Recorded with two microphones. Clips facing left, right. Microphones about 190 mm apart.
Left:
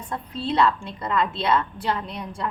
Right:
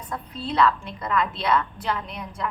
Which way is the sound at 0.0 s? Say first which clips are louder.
Left 3 dB; 25° left (ahead or behind).